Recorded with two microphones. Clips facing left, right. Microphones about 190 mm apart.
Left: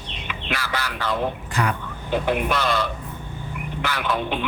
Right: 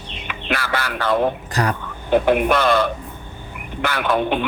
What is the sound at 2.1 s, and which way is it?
A man's voice, 55° right (ahead or behind).